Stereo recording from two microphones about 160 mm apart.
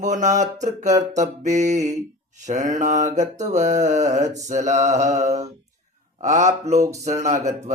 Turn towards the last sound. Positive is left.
turn(degrees=-50)  # may be behind; listen again after turning